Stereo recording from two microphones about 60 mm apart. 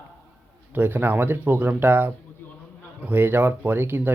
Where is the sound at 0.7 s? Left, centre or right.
Right.